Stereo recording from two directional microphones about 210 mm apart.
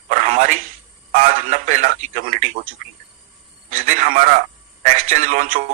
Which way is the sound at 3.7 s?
35° right (ahead or behind).